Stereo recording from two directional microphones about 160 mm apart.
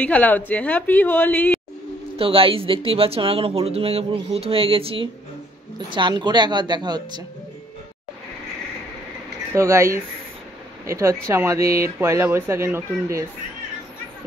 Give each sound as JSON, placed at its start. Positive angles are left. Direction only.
{"t": 0.0, "sound": "a woman's voice", "side_deg": 10}
{"t": 2.1, "sound": "a woman's voice", "side_deg": -35}
{"t": 9.6, "sound": "speech", "side_deg": -15}